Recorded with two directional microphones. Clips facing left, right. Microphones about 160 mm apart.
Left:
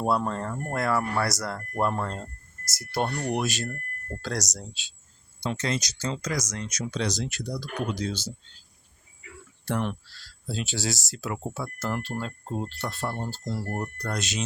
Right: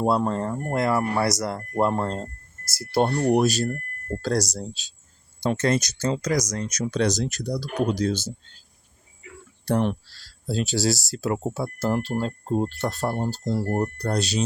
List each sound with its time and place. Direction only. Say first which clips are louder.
0.0 s speech: right 4 dB; 20° right (ahead or behind); by 4.9 s 40° right (ahead or behind)
5.4 s speech: right 7 dB; 50° right (ahead or behind)
9.6 s speech: right 6 dB; 35° right (ahead or behind)
12.5 s speech: right 7 dB; 50° right (ahead or behind)